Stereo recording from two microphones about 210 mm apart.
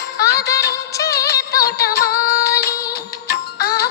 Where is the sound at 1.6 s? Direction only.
50° left (ahead or behind).